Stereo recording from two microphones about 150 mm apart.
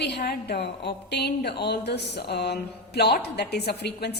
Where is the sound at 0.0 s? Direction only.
90° left.